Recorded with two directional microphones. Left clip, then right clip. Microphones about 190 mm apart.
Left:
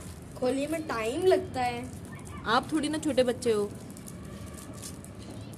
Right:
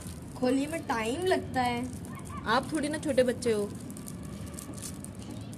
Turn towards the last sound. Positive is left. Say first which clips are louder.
# left 1 dB
turn(degrees=10)  # may be behind; listen again after turning